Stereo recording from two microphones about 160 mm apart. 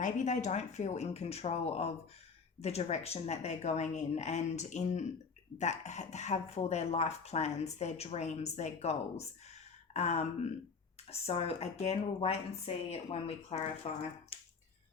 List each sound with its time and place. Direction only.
0.0 s speech: 50° left (ahead or behind)